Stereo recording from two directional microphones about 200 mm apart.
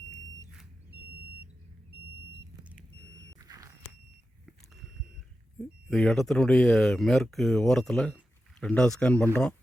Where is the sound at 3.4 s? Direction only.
15° right (ahead or behind).